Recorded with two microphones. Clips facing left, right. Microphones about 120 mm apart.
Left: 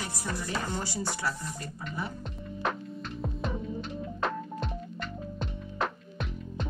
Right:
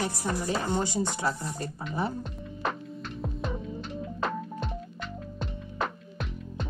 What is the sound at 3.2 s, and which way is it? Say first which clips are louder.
Music: even; centre (ahead or behind).